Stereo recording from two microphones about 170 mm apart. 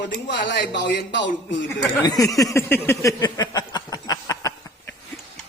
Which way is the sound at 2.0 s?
20° left (ahead or behind).